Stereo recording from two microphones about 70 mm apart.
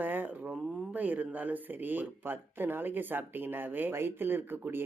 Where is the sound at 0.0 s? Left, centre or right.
Right.